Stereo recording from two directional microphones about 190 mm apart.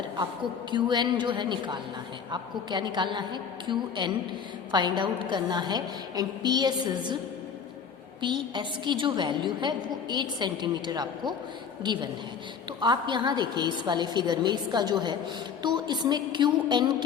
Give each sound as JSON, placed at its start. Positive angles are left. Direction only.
{"t": 0.7, "sound": "a woman's voice", "side_deg": -25}
{"t": 8.2, "sound": "a woman's voice", "side_deg": -25}